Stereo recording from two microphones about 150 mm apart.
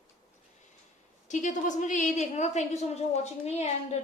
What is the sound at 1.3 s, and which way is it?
A woman's voice, 55° left (ahead or behind).